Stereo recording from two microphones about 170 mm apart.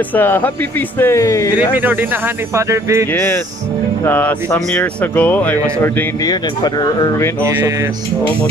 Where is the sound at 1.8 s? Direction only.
10° right (ahead or behind).